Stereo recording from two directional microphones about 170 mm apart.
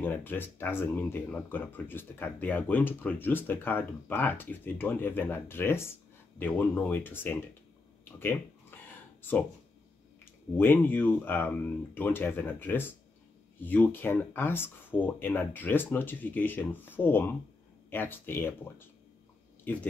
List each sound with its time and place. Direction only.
0.0 s speech: 10° left (ahead or behind)
8.0 s a sound: 10° left (ahead or behind)
10.6 s speech: 10° left (ahead or behind)